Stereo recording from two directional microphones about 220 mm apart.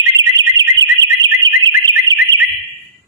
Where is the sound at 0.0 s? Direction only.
15° right (ahead or behind).